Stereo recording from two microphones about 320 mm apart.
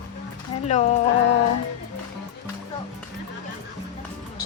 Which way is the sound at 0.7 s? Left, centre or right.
Left.